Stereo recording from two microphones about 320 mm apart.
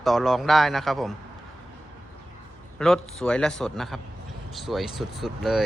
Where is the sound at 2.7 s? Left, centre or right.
Centre.